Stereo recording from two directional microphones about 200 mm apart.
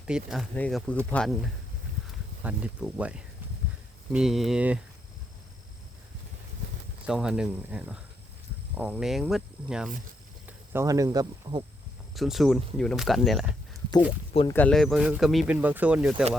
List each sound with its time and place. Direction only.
0.1 s speech: centre (ahead or behind)
2.4 s speech: 5° right (ahead or behind)
7.1 s speech: 5° right (ahead or behind)
12.1 s speech: centre (ahead or behind)